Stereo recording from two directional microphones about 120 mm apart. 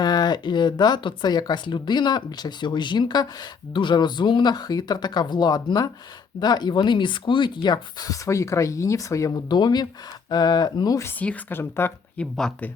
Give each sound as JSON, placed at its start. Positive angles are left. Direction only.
{"t": 0.0, "sound": "speech", "side_deg": 35}
{"t": 11.2, "sound": "speech", "side_deg": 15}